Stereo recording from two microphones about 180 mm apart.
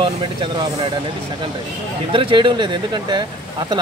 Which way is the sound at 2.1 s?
30° right (ahead or behind).